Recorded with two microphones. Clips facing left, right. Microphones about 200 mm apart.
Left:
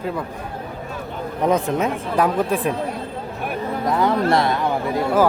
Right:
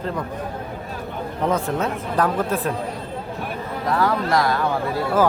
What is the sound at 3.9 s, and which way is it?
Speech, 20° left (ahead or behind).